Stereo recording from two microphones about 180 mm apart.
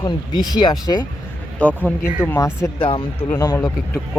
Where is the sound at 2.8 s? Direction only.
30° left (ahead or behind).